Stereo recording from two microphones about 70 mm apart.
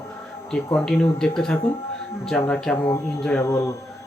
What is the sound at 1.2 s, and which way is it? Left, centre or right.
Speech, centre.